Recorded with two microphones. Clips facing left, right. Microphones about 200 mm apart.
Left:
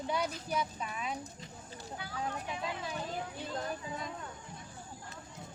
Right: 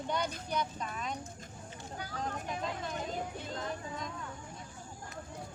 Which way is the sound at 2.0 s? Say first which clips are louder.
Even; 45° right (ahead or behind).